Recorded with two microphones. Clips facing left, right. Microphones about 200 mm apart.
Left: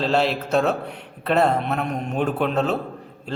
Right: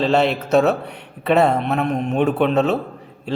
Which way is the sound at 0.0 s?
Centre (ahead or behind).